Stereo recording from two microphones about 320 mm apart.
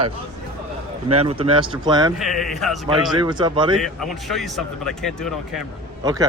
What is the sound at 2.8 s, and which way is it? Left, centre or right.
Speech, centre.